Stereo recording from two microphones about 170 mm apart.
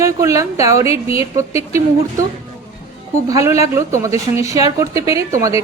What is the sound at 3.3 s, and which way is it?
A woman's voice, 20° right (ahead or behind).